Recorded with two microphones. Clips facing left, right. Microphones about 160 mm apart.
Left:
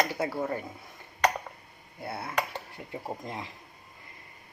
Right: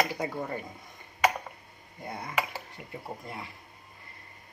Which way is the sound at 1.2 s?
5° right (ahead or behind).